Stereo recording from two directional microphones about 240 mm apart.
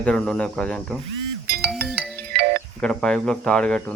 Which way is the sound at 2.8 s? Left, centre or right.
Centre.